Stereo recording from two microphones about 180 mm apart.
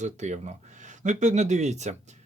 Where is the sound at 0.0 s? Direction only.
40° right (ahead or behind).